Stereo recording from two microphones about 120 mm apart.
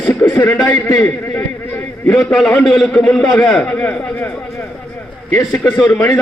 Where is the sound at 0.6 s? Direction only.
30° left (ahead or behind).